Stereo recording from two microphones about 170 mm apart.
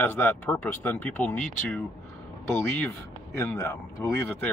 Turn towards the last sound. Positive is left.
turn(degrees=15)  # may be behind; listen again after turning